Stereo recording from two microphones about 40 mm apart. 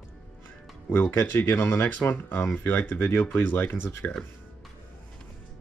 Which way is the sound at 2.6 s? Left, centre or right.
Left.